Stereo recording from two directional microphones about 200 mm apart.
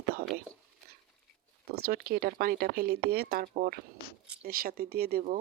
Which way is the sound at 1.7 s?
50° right (ahead or behind).